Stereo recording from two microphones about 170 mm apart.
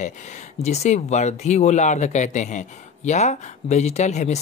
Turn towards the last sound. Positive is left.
turn(degrees=40)  # may be behind; listen again after turning